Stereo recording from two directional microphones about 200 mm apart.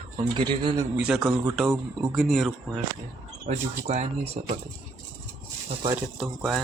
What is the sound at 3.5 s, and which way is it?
Speech, 35° right (ahead or behind).